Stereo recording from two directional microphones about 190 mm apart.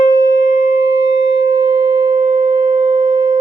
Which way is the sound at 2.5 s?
25° right (ahead or behind).